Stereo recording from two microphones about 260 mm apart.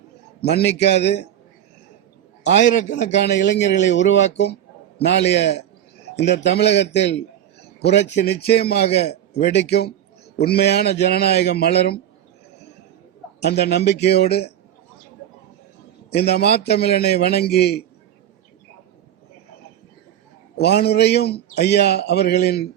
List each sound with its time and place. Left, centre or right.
0.4 s a man's voice: left
2.4 s a man's voice: left
8.0 s a man's voice: left
13.4 s a man's voice: left
16.2 s a man's voice: left
20.6 s a man's voice: left